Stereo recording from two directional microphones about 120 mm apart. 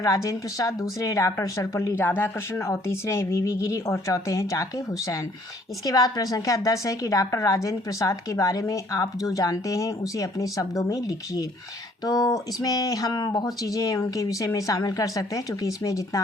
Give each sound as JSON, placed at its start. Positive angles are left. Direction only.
{"t": 0.0, "sound": "a woman's voice", "side_deg": 25}